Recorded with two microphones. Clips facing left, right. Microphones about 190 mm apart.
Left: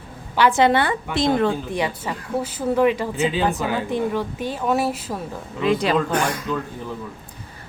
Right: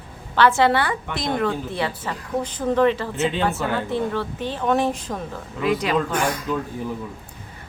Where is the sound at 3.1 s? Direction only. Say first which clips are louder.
Left 1 dB; centre (ahead or behind).